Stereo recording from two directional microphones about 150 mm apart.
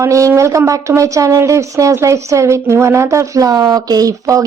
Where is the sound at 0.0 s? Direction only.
20° right (ahead or behind).